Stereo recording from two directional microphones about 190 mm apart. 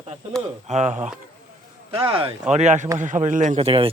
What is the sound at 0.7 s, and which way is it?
Speech, 35° right (ahead or behind).